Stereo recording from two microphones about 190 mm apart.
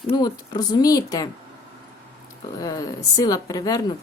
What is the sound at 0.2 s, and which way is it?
A woman's voice, 20° left (ahead or behind).